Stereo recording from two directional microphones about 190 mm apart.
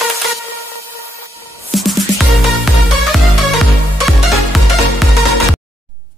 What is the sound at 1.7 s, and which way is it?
Music, centre (ahead or behind).